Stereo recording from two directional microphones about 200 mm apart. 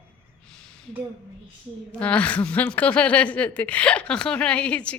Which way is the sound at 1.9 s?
5° left (ahead or behind).